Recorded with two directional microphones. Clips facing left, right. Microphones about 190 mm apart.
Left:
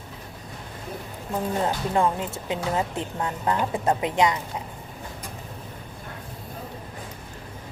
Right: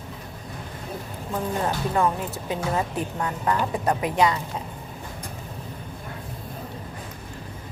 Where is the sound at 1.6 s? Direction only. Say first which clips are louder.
Even; 20° left (ahead or behind).